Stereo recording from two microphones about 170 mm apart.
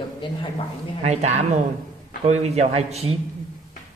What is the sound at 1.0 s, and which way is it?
A man's voice, 40° right (ahead or behind).